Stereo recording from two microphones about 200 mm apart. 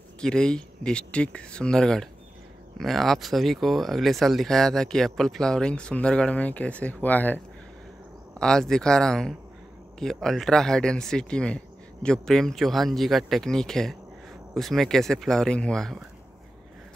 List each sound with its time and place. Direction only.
0.2 s speech: 5° left (ahead or behind)